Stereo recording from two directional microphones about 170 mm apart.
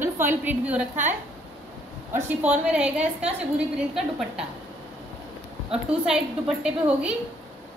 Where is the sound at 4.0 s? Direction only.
5° right (ahead or behind).